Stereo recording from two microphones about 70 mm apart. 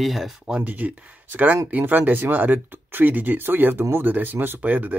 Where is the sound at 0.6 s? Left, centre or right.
Right.